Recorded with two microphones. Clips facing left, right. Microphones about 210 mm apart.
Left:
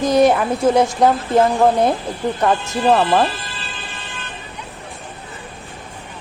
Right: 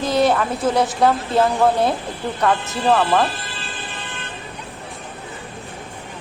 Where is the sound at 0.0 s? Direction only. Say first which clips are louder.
Left 4 dB; 20° left (ahead or behind).